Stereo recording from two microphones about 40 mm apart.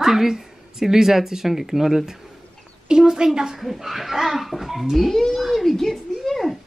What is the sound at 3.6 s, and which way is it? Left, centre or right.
Speech, centre.